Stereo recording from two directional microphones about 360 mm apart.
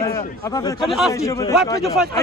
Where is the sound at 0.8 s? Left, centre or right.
Centre.